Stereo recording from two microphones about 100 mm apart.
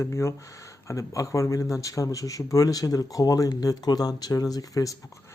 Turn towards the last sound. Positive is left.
turn(degrees=35)  # may be behind; listen again after turning